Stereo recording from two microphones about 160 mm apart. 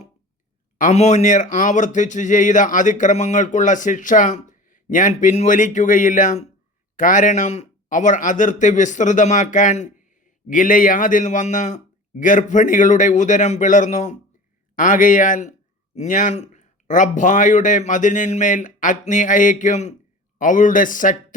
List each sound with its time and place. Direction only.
0.8 s a man's voice: 50° left (ahead or behind)